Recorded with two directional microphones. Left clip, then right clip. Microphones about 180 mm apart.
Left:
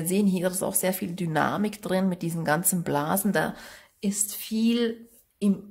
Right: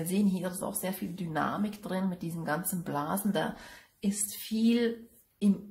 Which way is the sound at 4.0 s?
30° left (ahead or behind).